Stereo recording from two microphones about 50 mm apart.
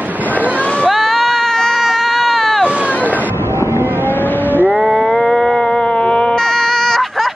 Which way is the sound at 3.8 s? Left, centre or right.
Right.